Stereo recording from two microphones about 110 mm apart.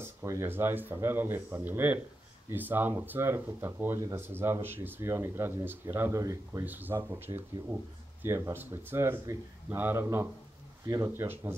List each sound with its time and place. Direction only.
0.0 s speech: 25° right (ahead or behind)
6.6 s speech: 15° right (ahead or behind)
11.1 s speech: 20° right (ahead or behind)